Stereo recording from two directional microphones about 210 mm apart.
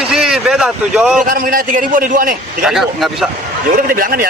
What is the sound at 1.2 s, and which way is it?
A man's voice, 40° right (ahead or behind).